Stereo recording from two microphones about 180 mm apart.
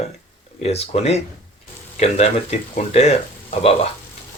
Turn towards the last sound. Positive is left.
turn(degrees=35)  # may be behind; listen again after turning